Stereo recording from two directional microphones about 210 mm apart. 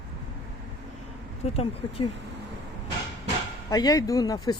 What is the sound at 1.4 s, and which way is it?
Speech, 30° left (ahead or behind).